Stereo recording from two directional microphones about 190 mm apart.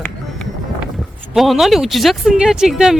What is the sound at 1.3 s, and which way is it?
Speech, centre (ahead or behind).